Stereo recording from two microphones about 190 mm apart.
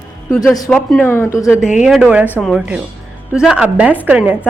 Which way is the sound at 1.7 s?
5° right (ahead or behind).